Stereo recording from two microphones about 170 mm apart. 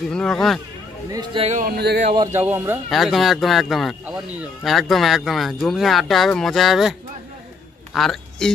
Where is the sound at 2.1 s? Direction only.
15° right (ahead or behind).